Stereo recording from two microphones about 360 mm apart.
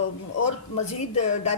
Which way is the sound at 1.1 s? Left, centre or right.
Left.